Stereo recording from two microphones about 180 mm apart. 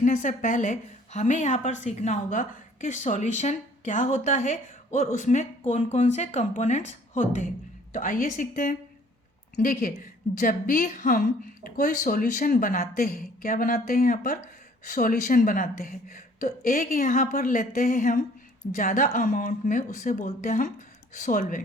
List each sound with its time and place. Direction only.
0.0 s a woman's voice: 45° left (ahead or behind)